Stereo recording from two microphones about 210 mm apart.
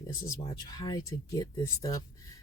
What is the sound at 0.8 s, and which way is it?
Speech, 20° left (ahead or behind).